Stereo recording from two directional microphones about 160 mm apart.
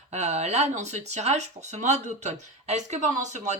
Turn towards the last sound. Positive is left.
turn(degrees=-45)  # may be behind; listen again after turning